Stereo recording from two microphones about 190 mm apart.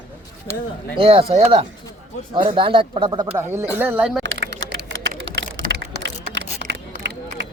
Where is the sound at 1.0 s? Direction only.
30° right (ahead or behind); by 4.2 s 5° right (ahead or behind).